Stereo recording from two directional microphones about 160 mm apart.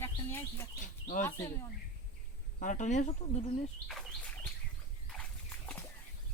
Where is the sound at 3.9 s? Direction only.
Centre (ahead or behind).